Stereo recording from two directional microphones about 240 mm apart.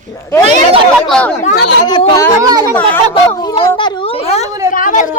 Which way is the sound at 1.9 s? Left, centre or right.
Centre.